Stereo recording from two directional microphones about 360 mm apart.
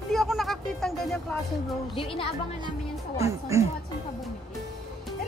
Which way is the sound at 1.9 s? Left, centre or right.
Centre.